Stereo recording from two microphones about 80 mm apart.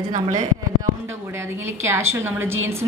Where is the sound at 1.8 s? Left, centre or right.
Right.